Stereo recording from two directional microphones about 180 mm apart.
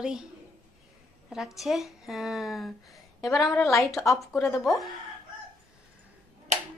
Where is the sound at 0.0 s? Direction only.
5° right (ahead or behind).